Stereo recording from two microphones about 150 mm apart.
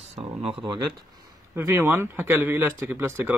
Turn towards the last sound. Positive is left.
turn(degrees=-15)  # may be behind; listen again after turning